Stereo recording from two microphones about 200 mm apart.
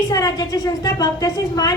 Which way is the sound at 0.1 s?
15° left (ahead or behind).